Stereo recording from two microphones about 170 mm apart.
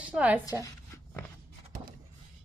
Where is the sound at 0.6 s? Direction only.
15° left (ahead or behind).